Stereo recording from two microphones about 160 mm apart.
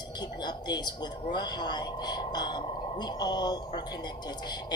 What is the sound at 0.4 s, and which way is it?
Speech, 25° left (ahead or behind).